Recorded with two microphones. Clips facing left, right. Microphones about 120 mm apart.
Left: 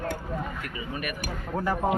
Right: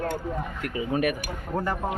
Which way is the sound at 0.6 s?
80° right.